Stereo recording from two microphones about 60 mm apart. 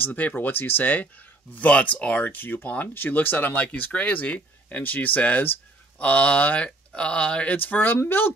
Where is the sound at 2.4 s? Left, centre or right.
Left.